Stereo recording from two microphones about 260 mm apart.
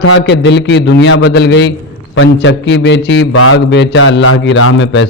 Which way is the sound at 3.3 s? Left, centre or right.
Left.